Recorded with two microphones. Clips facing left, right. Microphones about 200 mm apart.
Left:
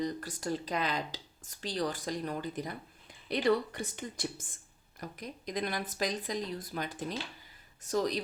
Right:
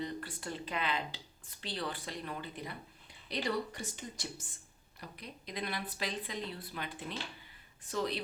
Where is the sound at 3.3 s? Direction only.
55° left (ahead or behind).